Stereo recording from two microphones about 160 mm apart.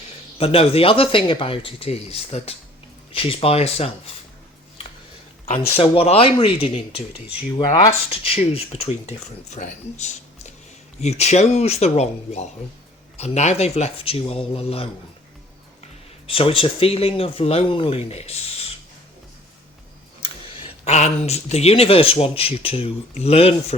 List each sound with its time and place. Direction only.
0.3 s speech: 35° left (ahead or behind)
5.7 s speech: 35° left (ahead or behind)
16.2 s speech: 35° left (ahead or behind)
20.8 s speech: 45° left (ahead or behind)